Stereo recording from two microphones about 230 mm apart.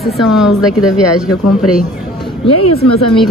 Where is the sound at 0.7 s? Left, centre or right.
Left.